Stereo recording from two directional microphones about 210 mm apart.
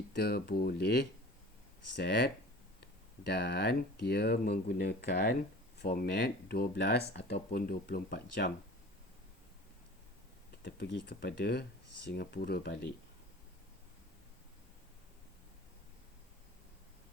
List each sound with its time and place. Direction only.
0.1 s speech: 50° left (ahead or behind)
2.0 s speech: 50° left (ahead or behind)
10.6 s speech: 50° left (ahead or behind)